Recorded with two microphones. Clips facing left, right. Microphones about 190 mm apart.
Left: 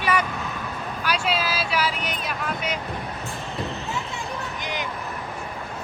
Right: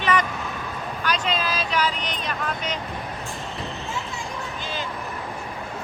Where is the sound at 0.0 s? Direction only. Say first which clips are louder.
Right 1 dB; 10° left (ahead or behind).